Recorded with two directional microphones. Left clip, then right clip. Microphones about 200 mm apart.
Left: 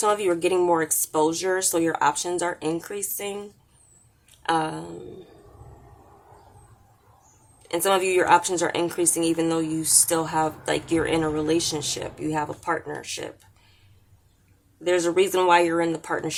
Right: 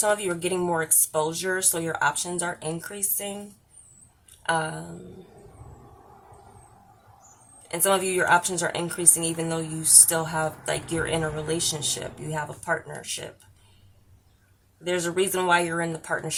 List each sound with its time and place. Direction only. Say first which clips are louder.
0.0 s speech: left 3 dB; 40° left (ahead or behind)
4.4 s speech: left 2 dB; 40° left (ahead or behind)
7.7 s speech: left 3 dB; 40° left (ahead or behind)
14.8 s speech: left 4 dB; 40° left (ahead or behind)